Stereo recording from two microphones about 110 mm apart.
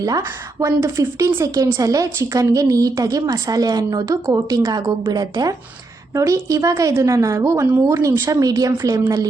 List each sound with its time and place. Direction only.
0.6 s a woman's voice: 25° right (ahead or behind)